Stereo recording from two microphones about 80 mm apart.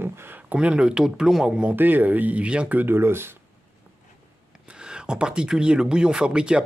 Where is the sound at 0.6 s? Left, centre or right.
Centre; by 3.3 s right.